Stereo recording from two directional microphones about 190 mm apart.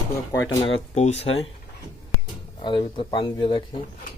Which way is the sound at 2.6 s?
25° left (ahead or behind).